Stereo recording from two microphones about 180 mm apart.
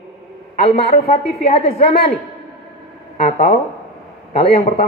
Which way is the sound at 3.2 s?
35° left (ahead or behind).